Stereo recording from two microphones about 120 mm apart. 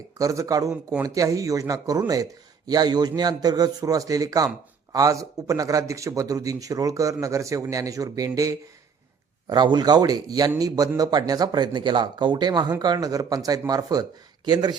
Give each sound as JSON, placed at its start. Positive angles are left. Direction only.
{"t": 0.2, "sound": "speech", "side_deg": -30}
{"t": 9.5, "sound": "speech", "side_deg": -35}